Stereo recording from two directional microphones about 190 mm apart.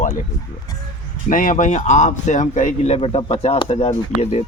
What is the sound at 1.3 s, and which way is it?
Speech, 45° left (ahead or behind).